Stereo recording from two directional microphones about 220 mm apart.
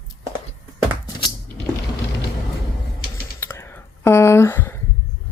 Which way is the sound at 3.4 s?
10° left (ahead or behind).